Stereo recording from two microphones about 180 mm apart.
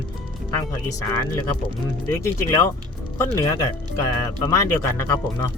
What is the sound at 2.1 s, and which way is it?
Speech, 15° left (ahead or behind).